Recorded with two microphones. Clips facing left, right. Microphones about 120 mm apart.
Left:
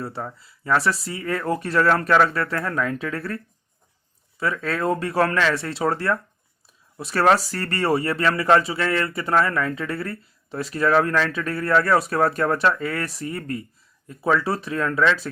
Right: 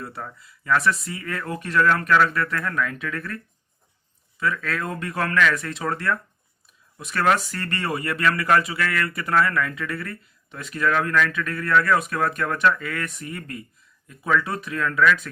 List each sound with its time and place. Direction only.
0.0 s speech: 30° left (ahead or behind)